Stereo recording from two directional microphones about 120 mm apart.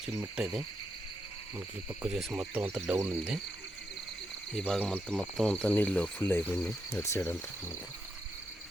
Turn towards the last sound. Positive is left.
turn(degrees=20)  # may be behind; listen again after turning